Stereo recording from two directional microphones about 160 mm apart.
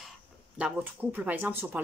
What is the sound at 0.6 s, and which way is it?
Speech, 10° right (ahead or behind).